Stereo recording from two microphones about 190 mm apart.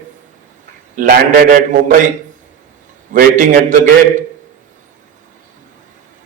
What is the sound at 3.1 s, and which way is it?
A man's voice, 45° right (ahead or behind).